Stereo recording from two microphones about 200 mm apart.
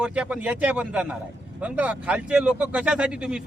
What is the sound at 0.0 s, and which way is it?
Speech, 5° right (ahead or behind).